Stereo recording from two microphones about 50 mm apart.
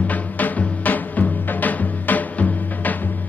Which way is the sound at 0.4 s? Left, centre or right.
Left.